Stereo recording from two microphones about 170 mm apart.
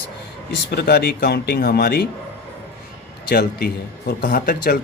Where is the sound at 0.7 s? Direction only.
70° left (ahead or behind).